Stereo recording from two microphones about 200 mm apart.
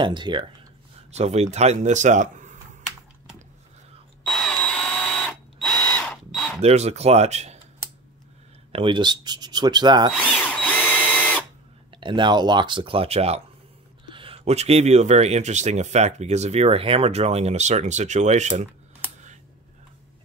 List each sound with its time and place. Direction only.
0.0 s speech: 25° right (ahead or behind); by 2.6 s 40° right (ahead or behind)
4.3 s drill: 5° left (ahead or behind)
6.6 s speech: 35° right (ahead or behind)
8.7 s speech: 25° right (ahead or behind)
10.4 s drill: 5° left (ahead or behind)
11.9 s speech: 25° right (ahead or behind)